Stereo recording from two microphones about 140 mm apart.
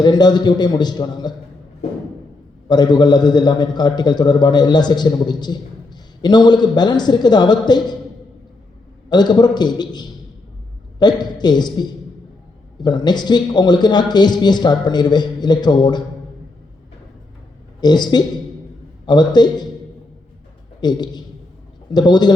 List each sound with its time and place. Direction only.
0.0 s a man's voice: 30° left (ahead or behind)
2.6 s a man's voice: 30° left (ahead or behind)
9.0 s a man's voice: 30° left (ahead or behind)
17.7 s a man's voice: 30° left (ahead or behind)
20.8 s a man's voice: 30° left (ahead or behind)